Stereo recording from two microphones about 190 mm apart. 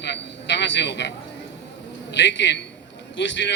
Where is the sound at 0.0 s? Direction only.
65° left (ahead or behind).